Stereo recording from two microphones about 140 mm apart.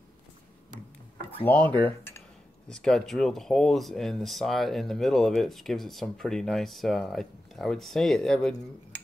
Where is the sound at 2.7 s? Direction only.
5° left (ahead or behind).